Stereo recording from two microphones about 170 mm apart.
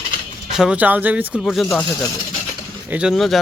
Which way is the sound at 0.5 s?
5° right (ahead or behind).